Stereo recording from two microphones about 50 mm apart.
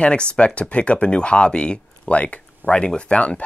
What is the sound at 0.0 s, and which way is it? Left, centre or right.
Speech, left.